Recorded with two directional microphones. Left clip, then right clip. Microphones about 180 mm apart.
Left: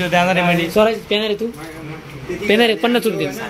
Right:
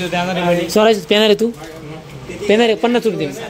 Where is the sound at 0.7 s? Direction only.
55° right (ahead or behind).